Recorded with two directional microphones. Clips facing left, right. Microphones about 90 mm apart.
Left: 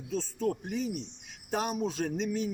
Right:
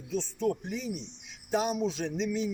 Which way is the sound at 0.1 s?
45° left (ahead or behind).